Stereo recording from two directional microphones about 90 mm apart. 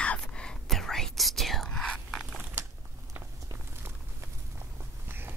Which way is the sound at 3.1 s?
25° right (ahead or behind).